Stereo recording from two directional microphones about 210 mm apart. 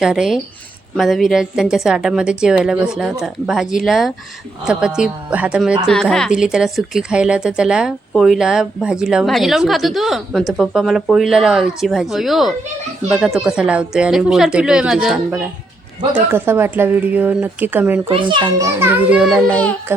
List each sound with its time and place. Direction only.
0.0 s a woman's voice: 5° right (ahead or behind)
18.1 s a child's voice: 25° right (ahead or behind)
18.8 s a woman's voice: 10° right (ahead or behind)